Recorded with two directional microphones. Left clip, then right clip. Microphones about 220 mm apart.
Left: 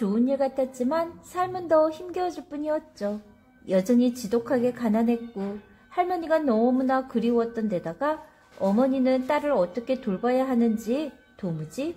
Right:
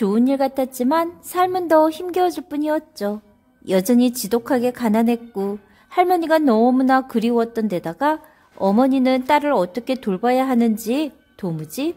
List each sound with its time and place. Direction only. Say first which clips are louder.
0.0 s a woman's voice: right 6 dB; 45° right (ahead or behind)